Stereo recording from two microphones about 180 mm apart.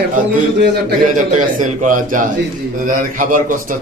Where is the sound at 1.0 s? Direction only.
45° right (ahead or behind).